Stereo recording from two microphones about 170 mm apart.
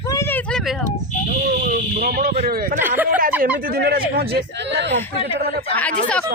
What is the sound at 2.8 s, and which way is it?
Speech, 10° right (ahead or behind).